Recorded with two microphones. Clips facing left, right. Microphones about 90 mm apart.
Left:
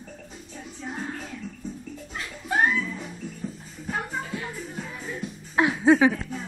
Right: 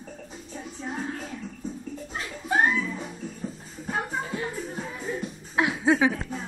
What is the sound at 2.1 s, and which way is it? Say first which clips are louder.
Music: right 1 dB; 25° right (ahead or behind).